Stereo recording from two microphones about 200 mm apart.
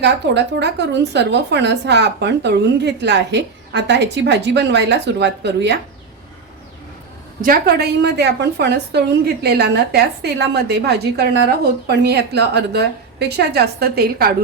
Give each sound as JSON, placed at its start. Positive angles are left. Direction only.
{"t": 0.0, "sound": "a woman's voice", "side_deg": -60}
{"t": 7.4, "sound": "a woman's voice", "side_deg": -50}